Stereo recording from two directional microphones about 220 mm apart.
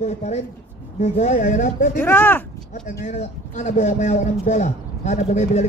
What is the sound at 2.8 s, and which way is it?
Speech, 35° left (ahead or behind).